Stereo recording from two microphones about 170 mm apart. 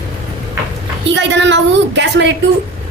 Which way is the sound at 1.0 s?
90° right.